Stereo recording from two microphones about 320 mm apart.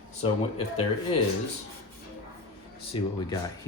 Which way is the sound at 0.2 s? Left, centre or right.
Centre.